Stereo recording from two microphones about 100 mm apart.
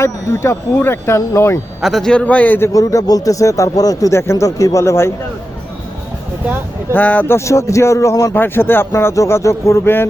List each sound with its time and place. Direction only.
0.0 s speech: 25° left (ahead or behind)
1.8 s a man's voice: centre (ahead or behind)
2.7 s speech: 35° left (ahead or behind)
6.9 s a man's voice: 15° left (ahead or behind)
7.3 s speech: 30° left (ahead or behind)